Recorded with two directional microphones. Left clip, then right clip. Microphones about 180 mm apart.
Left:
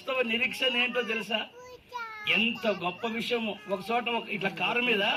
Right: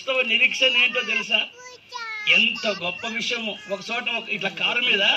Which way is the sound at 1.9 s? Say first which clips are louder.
Right 7 dB; 55° left (ahead or behind).